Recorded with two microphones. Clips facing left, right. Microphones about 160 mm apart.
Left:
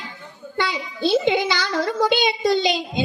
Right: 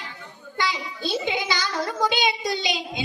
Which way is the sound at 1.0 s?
55° left (ahead or behind).